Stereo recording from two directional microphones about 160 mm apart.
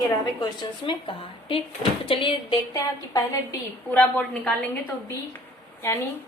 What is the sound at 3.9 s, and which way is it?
Speech, 10° left (ahead or behind).